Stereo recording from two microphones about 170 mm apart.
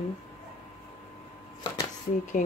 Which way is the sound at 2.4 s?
50° left (ahead or behind).